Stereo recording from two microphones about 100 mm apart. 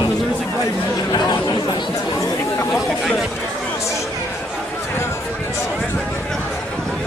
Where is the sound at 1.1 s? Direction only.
45° left (ahead or behind).